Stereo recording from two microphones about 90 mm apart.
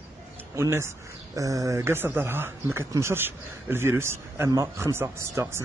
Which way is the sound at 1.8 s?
25° right (ahead or behind).